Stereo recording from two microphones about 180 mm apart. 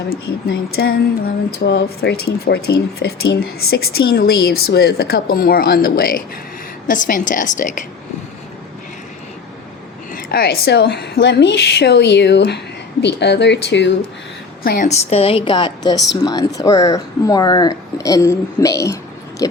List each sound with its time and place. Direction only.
0.1 s a woman's voice: 60° left (ahead or behind); by 7.9 s 45° left (ahead or behind)
10.1 s speech: 55° left (ahead or behind); by 13.9 s 75° left (ahead or behind)
14.6 s a woman's voice: 50° left (ahead or behind); by 19.6 s 20° left (ahead or behind)